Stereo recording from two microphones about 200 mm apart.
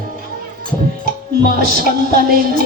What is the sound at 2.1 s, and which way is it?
Speech, 50° right (ahead or behind).